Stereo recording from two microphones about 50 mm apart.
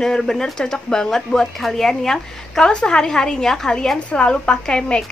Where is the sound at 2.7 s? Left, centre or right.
Centre.